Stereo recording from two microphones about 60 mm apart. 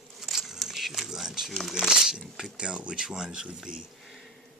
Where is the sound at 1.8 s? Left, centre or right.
Centre.